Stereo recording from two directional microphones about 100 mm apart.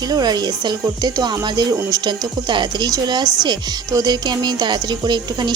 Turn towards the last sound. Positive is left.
turn(degrees=-45)  # may be behind; listen again after turning